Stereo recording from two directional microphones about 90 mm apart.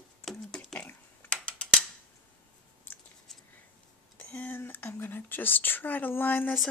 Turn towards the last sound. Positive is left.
turn(degrees=20)  # may be behind; listen again after turning